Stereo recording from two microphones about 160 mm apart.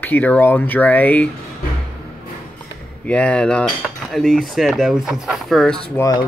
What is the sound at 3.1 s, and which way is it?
Speech, 5° left (ahead or behind).